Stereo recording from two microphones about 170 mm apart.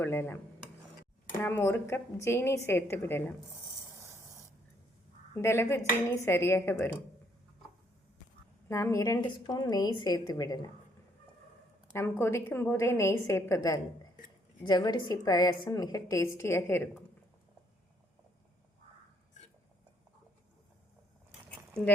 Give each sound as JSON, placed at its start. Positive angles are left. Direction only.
{"t": 0.0, "sound": "a woman's voice", "side_deg": 15}
{"t": 1.4, "sound": "a woman's voice", "side_deg": 10}
{"t": 3.9, "sound": "spray", "side_deg": -15}
{"t": 5.3, "sound": "a woman's voice", "side_deg": 15}
{"t": 8.7, "sound": "a woman's voice", "side_deg": 20}
{"t": 11.9, "sound": "a woman's voice", "side_deg": 15}